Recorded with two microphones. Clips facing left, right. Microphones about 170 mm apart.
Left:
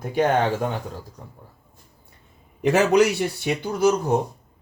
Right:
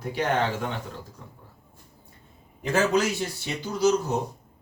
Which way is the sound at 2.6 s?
70° left (ahead or behind).